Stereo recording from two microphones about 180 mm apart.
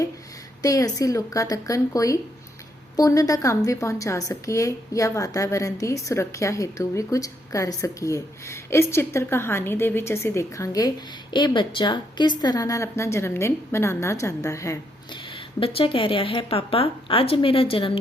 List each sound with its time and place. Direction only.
0.6 s a woman's voice: 20° left (ahead or behind)